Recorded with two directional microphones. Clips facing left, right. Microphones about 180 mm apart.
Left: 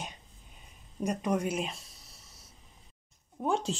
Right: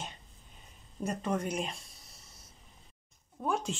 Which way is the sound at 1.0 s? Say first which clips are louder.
Left 3 dB; 15° left (ahead or behind).